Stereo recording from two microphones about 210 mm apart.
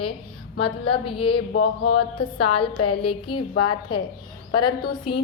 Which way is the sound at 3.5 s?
90° left.